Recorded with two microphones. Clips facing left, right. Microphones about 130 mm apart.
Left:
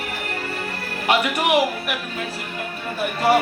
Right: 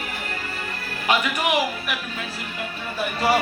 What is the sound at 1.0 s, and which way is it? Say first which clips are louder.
Speech: left 2 dB; 60° left (ahead or behind).